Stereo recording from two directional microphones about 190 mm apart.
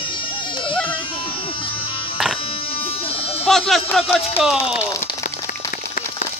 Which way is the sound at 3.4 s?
Centre (ahead or behind).